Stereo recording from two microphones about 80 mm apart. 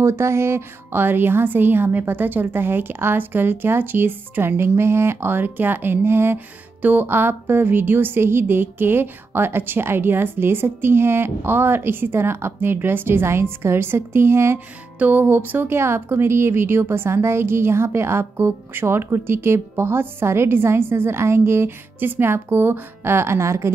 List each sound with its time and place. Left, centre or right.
0.0 s speech: right
15.0 s a woman's voice: right